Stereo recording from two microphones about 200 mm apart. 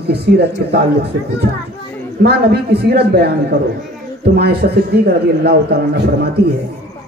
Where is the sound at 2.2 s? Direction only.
55° right (ahead or behind).